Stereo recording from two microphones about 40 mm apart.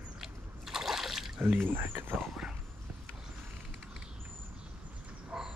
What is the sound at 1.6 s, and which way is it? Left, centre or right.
Speech, right.